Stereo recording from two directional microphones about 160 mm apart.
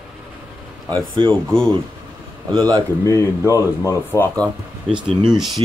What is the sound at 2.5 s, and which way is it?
Speech, 25° right (ahead or behind).